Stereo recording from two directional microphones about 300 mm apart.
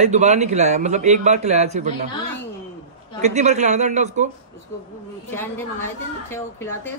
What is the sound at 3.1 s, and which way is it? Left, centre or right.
A man's voice, right.